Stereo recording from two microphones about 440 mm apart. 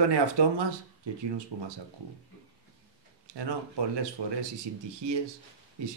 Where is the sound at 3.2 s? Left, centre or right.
Right.